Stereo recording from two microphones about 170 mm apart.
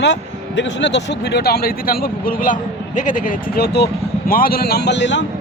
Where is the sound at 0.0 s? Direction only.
90° left.